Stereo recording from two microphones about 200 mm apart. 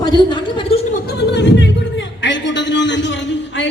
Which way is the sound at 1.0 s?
55° left (ahead or behind).